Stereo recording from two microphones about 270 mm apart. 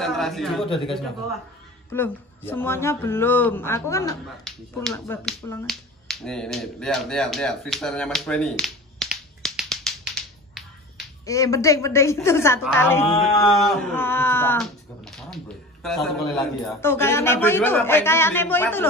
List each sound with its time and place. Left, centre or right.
0.0 s a man's voice: centre
0.7 s a man's voice: centre
1.9 s speech: centre
11.2 s speech: centre